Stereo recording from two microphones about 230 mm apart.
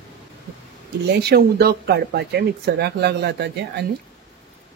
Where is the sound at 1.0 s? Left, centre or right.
Right.